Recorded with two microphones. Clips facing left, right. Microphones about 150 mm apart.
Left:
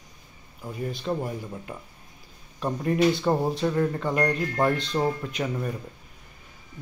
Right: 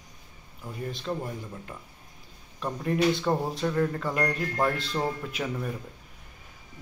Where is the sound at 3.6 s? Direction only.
10° left (ahead or behind).